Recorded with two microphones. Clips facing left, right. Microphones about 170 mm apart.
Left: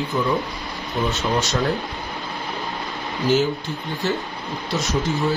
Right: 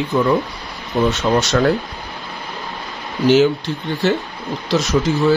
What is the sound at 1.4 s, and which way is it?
Speech, 80° right.